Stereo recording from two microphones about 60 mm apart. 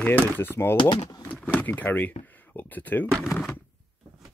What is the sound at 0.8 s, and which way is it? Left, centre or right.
Speech, left.